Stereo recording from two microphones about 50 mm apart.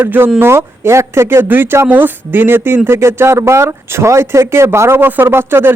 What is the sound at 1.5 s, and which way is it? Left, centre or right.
Speech, right.